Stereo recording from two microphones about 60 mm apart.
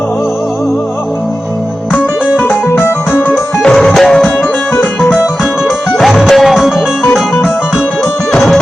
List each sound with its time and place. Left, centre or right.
2.6 s music: left
3.8 s music: centre
5.6 s music: centre
8.4 s music: centre